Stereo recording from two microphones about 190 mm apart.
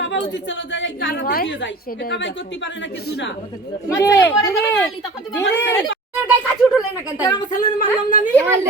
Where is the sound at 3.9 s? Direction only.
15° left (ahead or behind).